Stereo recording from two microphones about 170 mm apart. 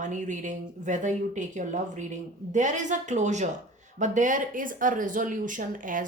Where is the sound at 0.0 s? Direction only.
45° right (ahead or behind).